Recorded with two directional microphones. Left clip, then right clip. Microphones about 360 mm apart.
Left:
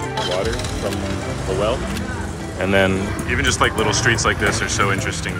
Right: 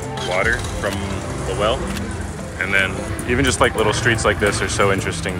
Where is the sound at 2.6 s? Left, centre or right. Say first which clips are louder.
Left 1 dB; left.